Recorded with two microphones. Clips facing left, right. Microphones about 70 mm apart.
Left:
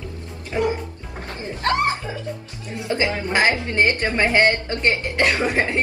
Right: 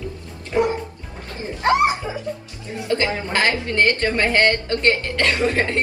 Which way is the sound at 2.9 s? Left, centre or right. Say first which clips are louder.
Even; centre.